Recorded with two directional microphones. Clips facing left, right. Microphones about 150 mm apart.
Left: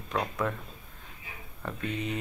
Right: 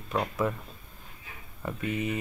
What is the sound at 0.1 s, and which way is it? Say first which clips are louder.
Speech: right 2 dB; 5° right (ahead or behind).